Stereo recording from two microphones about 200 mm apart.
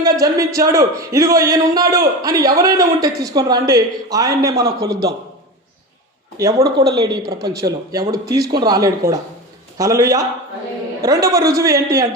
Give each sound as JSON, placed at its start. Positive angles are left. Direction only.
{"t": 0.0, "sound": "a man's voice", "side_deg": -15}
{"t": 6.3, "sound": "a man's voice", "side_deg": -15}